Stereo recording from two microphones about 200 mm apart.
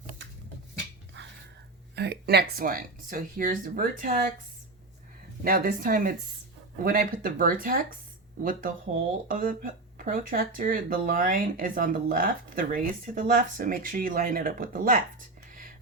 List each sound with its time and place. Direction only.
1.2 s a sound: 65° right (ahead or behind)
2.0 s speech: 55° right (ahead or behind)
5.4 s speech: 45° right (ahead or behind)